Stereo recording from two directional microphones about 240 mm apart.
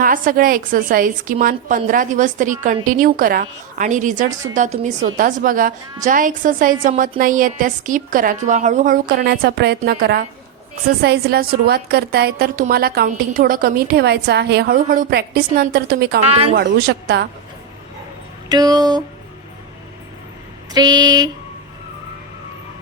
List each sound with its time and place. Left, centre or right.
0.0 s a woman's voice: right
16.2 s speech: right
16.6 s a woman's voice: right
18.4 s speech: centre
20.7 s speech: centre